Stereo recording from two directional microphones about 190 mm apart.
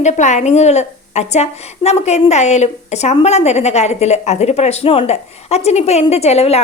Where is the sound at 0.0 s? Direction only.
40° left (ahead or behind).